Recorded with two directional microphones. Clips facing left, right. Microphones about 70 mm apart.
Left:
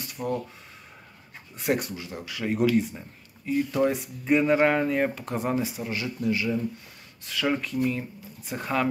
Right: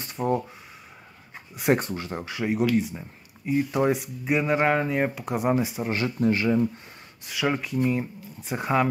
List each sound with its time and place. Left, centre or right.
0.0 s a sound: right
1.7 s speech: right
2.5 s speech: centre
3.4 s speech: centre
5.9 s speech: right
7.2 s speech: centre